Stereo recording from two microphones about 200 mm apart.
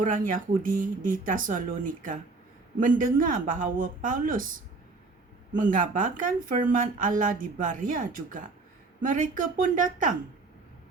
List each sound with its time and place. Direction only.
0.0 s speech: 40° right (ahead or behind)
2.8 s speech: 40° right (ahead or behind)